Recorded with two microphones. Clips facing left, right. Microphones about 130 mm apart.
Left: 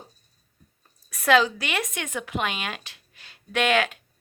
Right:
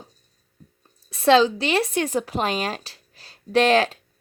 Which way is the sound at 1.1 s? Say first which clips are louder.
Right 4 dB; 25° right (ahead or behind).